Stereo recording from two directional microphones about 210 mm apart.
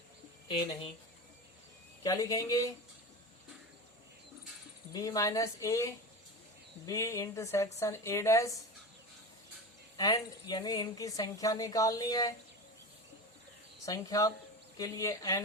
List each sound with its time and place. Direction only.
0.4 s speech: 20° left (ahead or behind)
2.0 s speech: 15° left (ahead or behind)
4.9 s speech: 15° left (ahead or behind)
10.0 s speech: 20° left (ahead or behind)
13.8 s speech: 15° left (ahead or behind)